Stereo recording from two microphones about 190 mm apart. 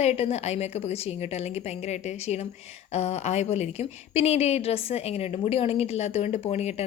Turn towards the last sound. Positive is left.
turn(degrees=35)  # may be behind; listen again after turning